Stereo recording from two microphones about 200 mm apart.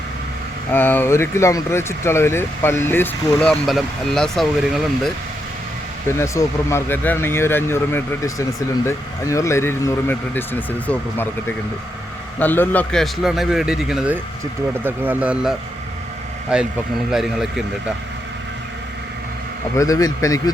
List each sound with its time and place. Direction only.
0.7 s speech: 10° left (ahead or behind)
6.1 s a man's voice: 15° left (ahead or behind); by 17.9 s centre (ahead or behind)
19.7 s speech: 15° left (ahead or behind)